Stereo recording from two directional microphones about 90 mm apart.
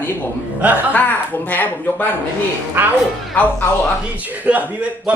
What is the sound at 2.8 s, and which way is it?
Speech, 20° right (ahead or behind).